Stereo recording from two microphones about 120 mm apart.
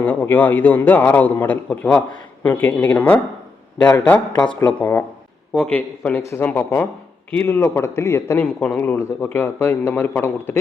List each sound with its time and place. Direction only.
0.0 s a man's voice: 10° left (ahead or behind)